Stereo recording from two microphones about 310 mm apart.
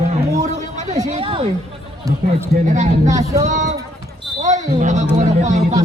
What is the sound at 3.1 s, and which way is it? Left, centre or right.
Speech, centre.